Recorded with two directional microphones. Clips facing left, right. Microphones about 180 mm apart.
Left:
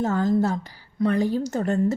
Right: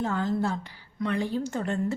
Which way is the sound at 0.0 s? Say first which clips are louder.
Left 6 dB; 40° left (ahead or behind).